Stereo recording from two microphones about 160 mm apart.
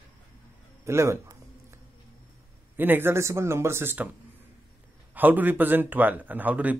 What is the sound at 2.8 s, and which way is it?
Speech, 15° right (ahead or behind).